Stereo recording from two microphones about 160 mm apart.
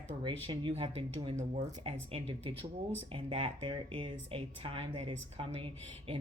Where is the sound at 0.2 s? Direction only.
30° right (ahead or behind).